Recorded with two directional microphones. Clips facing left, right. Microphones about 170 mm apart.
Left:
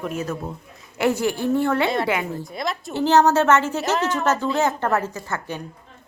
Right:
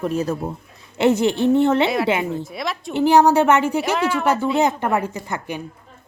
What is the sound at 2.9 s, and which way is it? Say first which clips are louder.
A woman's voice: right 3 dB; 15° right (ahead or behind).